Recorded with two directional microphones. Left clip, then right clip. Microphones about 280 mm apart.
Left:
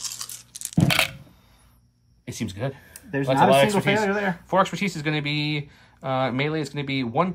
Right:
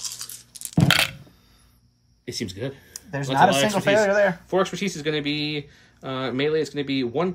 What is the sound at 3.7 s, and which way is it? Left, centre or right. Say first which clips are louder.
Speech: right 3 dB; centre.